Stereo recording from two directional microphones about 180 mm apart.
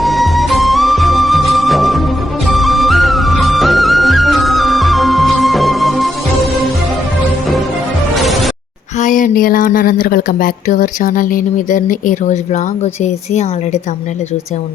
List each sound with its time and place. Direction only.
0.0 s music: centre (ahead or behind)
8.2 s music: centre (ahead or behind)
9.0 s speech: 45° left (ahead or behind)